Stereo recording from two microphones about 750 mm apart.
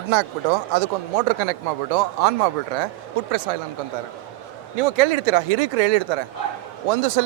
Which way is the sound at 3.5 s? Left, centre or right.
Right.